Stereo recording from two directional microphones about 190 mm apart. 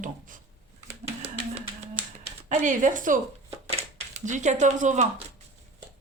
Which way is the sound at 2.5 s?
40° right (ahead or behind).